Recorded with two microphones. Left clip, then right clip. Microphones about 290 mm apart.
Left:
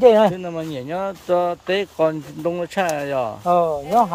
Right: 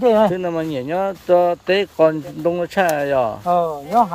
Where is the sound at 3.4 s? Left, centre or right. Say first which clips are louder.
Left 1 dB; left.